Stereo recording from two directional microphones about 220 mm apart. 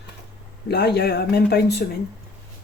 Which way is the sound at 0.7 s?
50° left (ahead or behind).